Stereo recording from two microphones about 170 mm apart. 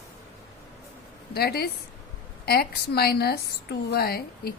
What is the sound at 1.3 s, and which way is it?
Speech, 65° left (ahead or behind).